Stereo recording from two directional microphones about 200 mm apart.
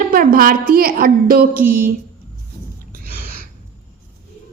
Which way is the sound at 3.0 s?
45° right (ahead or behind).